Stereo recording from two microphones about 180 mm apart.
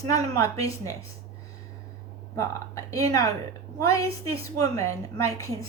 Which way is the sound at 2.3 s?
20° left (ahead or behind).